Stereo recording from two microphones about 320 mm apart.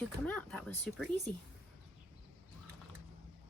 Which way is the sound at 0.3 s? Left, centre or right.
Centre.